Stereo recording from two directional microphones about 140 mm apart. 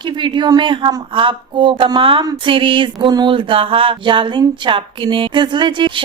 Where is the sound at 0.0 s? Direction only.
35° right (ahead or behind).